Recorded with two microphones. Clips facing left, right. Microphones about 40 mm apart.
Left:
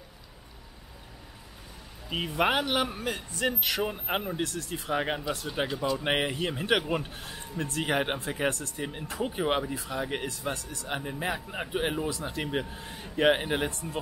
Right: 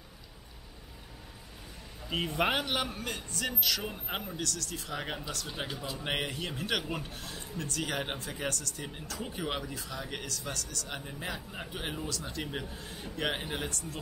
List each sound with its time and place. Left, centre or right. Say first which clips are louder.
2.0 s speech: left 3 dB; centre; by 13.9 s left